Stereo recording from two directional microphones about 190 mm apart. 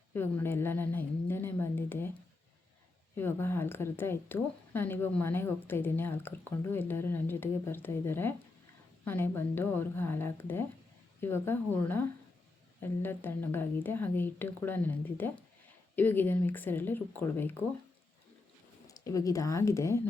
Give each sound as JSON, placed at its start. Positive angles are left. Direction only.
{"t": 0.1, "sound": "speech", "side_deg": 10}
{"t": 3.2, "sound": "speech", "side_deg": 10}
{"t": 18.9, "sound": "speech", "side_deg": 15}